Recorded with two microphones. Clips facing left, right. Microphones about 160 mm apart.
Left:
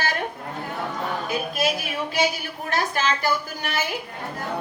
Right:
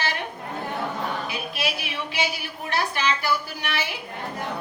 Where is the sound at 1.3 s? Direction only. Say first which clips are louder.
Left 5 dB; 45° left (ahead or behind).